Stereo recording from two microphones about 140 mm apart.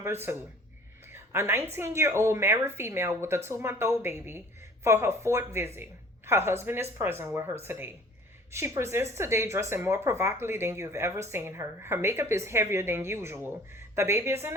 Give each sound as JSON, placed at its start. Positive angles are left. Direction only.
{"t": 0.0, "sound": "a woman's voice", "side_deg": -15}
{"t": 1.1, "sound": "a sound", "side_deg": -20}
{"t": 1.7, "sound": "a woman's voice", "side_deg": -20}